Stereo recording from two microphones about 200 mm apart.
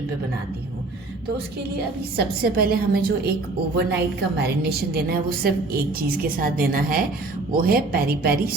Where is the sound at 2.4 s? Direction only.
50° right (ahead or behind).